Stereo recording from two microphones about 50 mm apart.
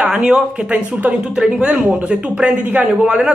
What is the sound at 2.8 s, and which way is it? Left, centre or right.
Speech, centre.